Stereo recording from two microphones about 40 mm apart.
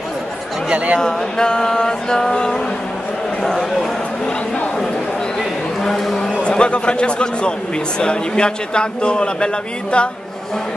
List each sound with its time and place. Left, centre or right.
0.7 s speech: right
1.0 s music: centre
5.9 s speech: centre
6.5 s speech: left